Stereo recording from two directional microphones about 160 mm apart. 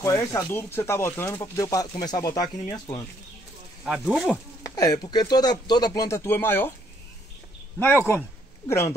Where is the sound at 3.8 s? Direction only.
5° right (ahead or behind).